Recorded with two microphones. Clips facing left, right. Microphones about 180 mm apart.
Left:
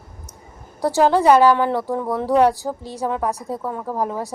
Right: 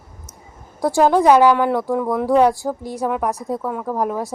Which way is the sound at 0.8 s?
15° right (ahead or behind).